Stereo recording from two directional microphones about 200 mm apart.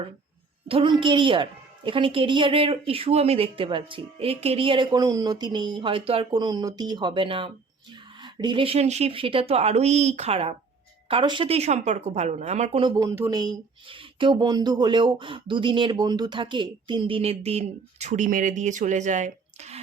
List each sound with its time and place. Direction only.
0.7 s speech: 25° right (ahead or behind)
13.0 s speech: 15° right (ahead or behind); by 19.8 s 35° right (ahead or behind)